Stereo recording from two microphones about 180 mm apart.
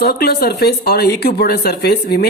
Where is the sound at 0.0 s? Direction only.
60° left (ahead or behind).